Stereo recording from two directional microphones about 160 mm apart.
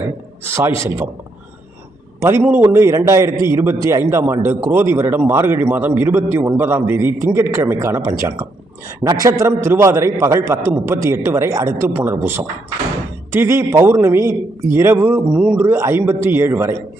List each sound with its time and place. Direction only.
0.4 s a man's voice: 15° right (ahead or behind)
2.2 s a man's voice: 15° right (ahead or behind)